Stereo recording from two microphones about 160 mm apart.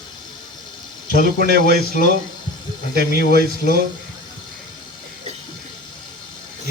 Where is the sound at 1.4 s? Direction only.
75° right (ahead or behind).